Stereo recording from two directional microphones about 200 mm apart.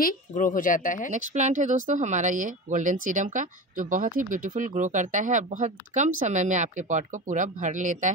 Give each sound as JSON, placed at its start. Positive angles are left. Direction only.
{"t": 0.0, "sound": "speech", "side_deg": 40}
{"t": 1.1, "sound": "speech", "side_deg": -35}